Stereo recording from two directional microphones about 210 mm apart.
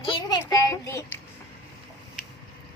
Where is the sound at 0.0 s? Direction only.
20° left (ahead or behind).